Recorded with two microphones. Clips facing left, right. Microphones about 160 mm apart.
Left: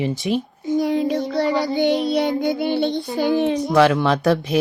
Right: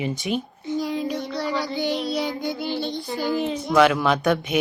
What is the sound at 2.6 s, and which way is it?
Child singing, 60° left (ahead or behind).